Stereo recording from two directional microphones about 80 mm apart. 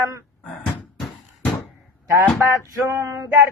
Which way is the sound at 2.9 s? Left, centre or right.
Right.